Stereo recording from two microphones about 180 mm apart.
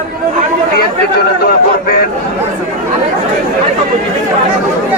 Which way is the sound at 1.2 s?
55° left (ahead or behind).